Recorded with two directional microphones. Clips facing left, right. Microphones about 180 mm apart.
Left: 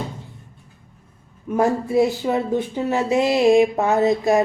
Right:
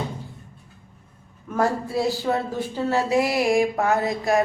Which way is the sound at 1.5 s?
20° left (ahead or behind).